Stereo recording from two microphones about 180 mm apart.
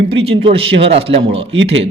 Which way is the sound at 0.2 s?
30° right (ahead or behind).